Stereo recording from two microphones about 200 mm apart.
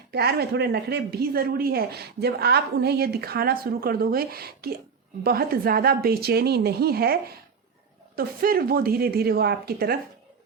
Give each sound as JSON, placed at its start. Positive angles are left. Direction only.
{"t": 0.1, "sound": "speech", "side_deg": -55}